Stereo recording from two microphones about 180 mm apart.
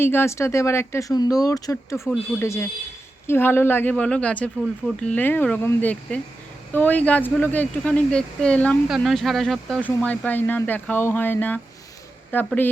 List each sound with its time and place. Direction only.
0.0 s speech: 10° left (ahead or behind)